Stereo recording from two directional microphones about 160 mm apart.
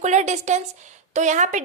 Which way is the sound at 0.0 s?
45° right (ahead or behind).